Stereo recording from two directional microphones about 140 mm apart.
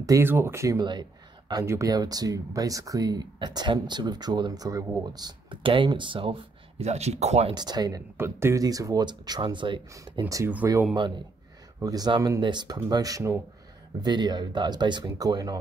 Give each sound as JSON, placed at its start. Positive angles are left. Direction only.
{"t": 0.0, "sound": "speech", "side_deg": -20}
{"t": 6.8, "sound": "speech", "side_deg": -50}
{"t": 7.5, "sound": "speech", "side_deg": -30}
{"t": 8.2, "sound": "speech", "side_deg": -20}
{"t": 11.8, "sound": "speech", "side_deg": -25}